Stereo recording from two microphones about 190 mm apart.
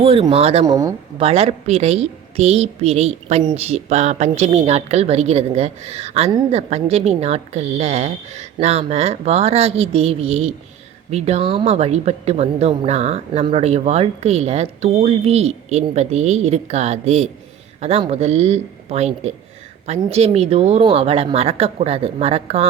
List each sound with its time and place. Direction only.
0.0 s speech: 30° right (ahead or behind)
0.6 s speech: 20° right (ahead or behind)
1.2 s speech: 35° right (ahead or behind)